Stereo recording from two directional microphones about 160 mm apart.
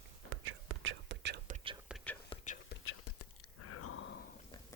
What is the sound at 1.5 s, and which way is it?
Whispering, 55° right (ahead or behind).